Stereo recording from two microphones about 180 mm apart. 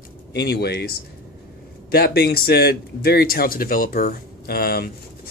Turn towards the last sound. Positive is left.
turn(degrees=60)  # may be behind; listen again after turning